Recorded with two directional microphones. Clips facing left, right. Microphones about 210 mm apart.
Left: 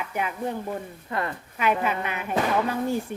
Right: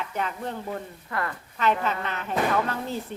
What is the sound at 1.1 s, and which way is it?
Speech, 20° left (ahead or behind).